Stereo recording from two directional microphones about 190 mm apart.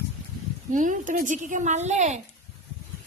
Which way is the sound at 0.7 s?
40° right (ahead or behind).